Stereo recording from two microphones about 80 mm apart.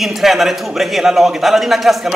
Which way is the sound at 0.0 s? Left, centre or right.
Centre.